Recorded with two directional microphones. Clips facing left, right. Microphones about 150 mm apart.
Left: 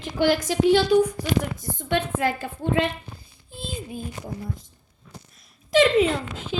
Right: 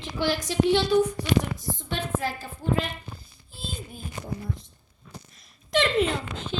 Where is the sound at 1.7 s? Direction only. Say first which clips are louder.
Left 7 dB; 60° left (ahead or behind).